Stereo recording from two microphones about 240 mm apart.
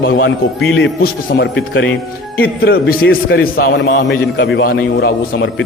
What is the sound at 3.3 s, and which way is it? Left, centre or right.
A man's voice, left.